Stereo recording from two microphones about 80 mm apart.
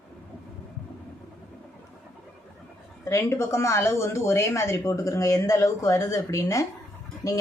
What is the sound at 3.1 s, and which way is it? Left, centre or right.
A woman's voice, left.